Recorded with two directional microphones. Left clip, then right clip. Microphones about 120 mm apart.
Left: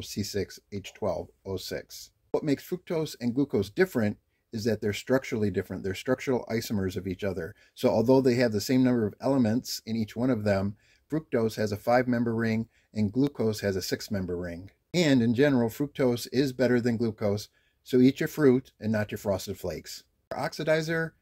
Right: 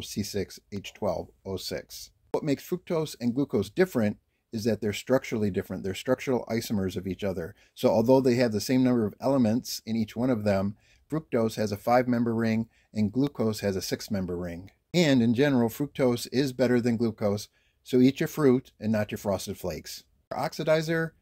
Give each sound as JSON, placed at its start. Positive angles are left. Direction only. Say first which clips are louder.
{"t": 0.0, "sound": "speech", "louder": "even", "side_deg": -35}